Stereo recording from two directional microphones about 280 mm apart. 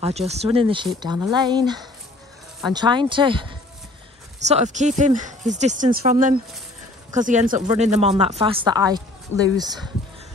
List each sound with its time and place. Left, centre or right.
0.0 s speech: right
4.5 s speech: right